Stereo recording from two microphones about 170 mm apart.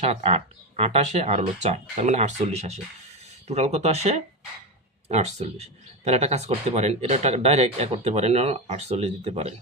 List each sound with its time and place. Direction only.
0.0 s speech: 40° right (ahead or behind)